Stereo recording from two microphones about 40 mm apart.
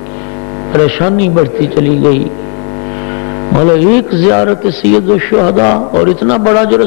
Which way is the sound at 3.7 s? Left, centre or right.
Centre.